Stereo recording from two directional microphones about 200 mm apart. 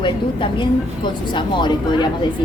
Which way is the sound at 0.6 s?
25° left (ahead or behind).